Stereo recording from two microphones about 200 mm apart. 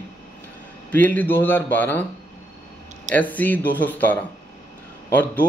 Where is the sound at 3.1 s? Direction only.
10° left (ahead or behind).